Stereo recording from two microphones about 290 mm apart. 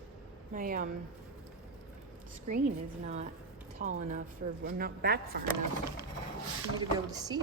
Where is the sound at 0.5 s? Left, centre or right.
Right.